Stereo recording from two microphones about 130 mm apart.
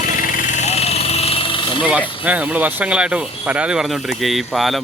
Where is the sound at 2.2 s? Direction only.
10° right (ahead or behind).